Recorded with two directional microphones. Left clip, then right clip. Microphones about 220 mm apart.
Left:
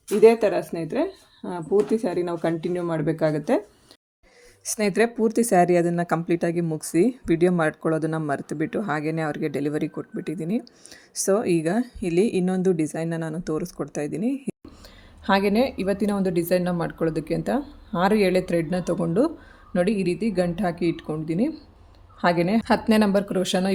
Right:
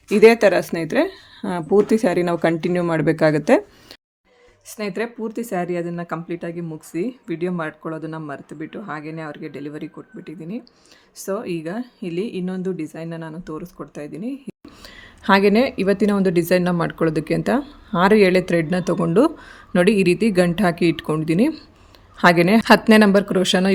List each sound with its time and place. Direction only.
0.2 s speech: 45° right (ahead or behind)
4.6 s speech: 20° left (ahead or behind)
15.2 s speech: 25° right (ahead or behind)